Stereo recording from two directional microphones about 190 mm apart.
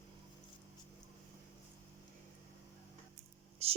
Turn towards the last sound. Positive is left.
turn(degrees=-35)  # may be behind; listen again after turning